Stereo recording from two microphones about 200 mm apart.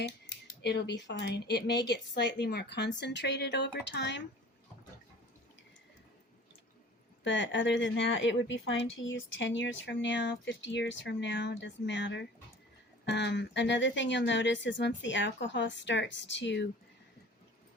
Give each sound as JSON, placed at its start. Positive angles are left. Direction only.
{"t": 0.6, "sound": "speech", "side_deg": 55}
{"t": 7.3, "sound": "speech", "side_deg": 65}